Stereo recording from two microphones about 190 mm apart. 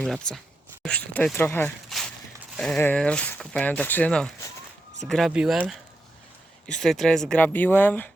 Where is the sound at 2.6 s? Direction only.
5° left (ahead or behind).